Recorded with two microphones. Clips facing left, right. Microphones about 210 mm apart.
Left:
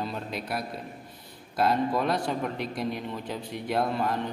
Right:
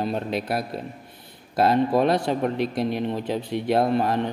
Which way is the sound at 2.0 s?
80° right.